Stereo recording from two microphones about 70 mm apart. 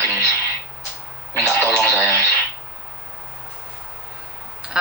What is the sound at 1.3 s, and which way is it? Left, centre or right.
Speech, right.